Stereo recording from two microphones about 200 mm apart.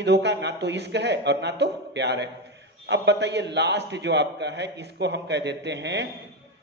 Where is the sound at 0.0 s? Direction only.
60° right (ahead or behind).